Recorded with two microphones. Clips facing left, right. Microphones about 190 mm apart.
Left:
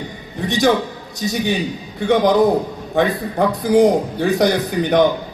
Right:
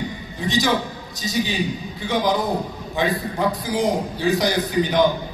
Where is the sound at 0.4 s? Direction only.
60° left (ahead or behind).